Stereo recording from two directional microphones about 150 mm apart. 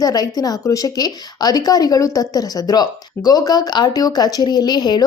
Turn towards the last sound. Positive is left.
turn(degrees=30)  # may be behind; listen again after turning